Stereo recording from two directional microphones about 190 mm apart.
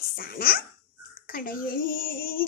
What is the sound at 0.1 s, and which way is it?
A child's voice, 50° left (ahead or behind).